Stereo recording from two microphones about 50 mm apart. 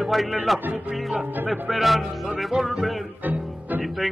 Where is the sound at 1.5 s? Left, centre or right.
Centre.